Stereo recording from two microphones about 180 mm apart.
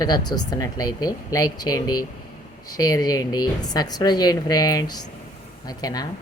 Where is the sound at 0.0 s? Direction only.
20° left (ahead or behind).